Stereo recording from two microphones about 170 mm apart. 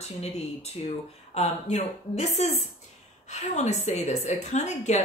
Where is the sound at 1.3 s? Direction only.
40° left (ahead or behind).